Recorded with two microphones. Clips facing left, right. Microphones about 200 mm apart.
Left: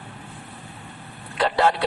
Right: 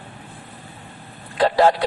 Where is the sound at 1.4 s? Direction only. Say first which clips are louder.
Right 5 dB; 35° right (ahead or behind).